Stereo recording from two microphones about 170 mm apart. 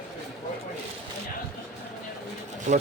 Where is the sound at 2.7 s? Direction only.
45° right (ahead or behind).